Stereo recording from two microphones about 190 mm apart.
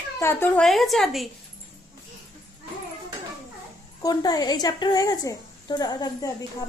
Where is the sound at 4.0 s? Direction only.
20° left (ahead or behind).